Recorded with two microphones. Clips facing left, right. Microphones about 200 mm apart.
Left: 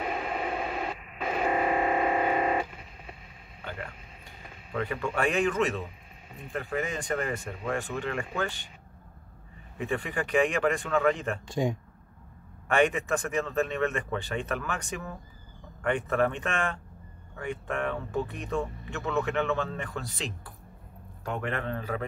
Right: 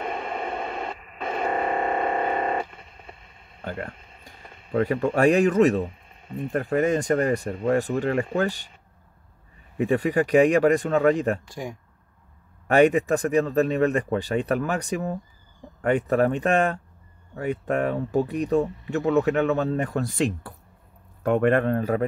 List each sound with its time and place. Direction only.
0.0 s radio: 5° left (ahead or behind)
3.6 s a sound: 40° right (ahead or behind)
6.5 s speech: 45° right (ahead or behind)
9.8 s speech: 40° right (ahead or behind)
11.4 s speech: 20° left (ahead or behind)
12.6 s a man's voice: 40° right (ahead or behind)